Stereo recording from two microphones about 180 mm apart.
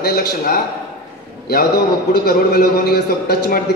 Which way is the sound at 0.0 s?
65° left (ahead or behind).